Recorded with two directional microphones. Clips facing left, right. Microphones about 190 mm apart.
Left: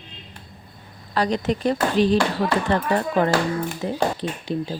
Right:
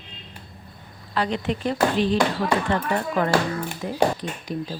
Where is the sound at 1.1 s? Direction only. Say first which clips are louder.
Left 3 dB; 40° left (ahead or behind).